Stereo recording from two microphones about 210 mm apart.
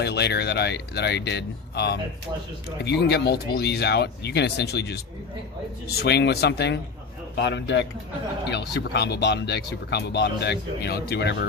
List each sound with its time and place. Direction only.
0.0 s speech: 55° left (ahead or behind)